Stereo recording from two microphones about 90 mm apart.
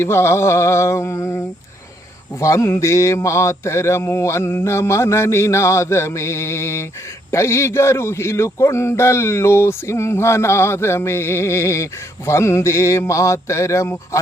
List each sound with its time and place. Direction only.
0.0 s speech: 30° left (ahead or behind)
2.4 s speech: 35° left (ahead or behind)